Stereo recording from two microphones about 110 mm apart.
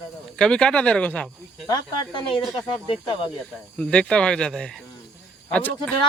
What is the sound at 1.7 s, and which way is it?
Speech, 50° left (ahead or behind).